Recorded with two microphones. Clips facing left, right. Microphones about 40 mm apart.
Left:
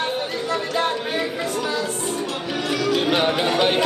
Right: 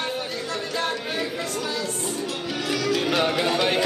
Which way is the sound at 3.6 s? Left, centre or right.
Left.